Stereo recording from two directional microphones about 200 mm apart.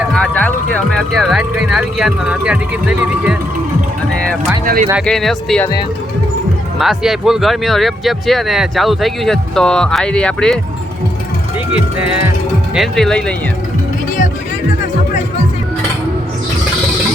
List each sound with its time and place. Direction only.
0.1 s speech: 5° left (ahead or behind)
4.6 s speech: 45° right (ahead or behind)
5.0 s speech: centre (ahead or behind)
6.7 s speech: centre (ahead or behind)
12.7 s speech: centre (ahead or behind)